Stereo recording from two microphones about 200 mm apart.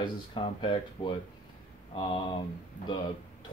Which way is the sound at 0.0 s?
25° left (ahead or behind).